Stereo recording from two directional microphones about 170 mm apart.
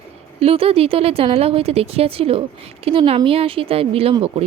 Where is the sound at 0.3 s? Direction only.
35° right (ahead or behind).